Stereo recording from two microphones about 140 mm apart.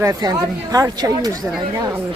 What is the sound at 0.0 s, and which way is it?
Speech, 25° right (ahead or behind).